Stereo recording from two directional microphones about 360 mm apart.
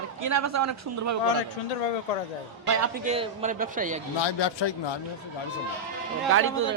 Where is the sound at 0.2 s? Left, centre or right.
Right.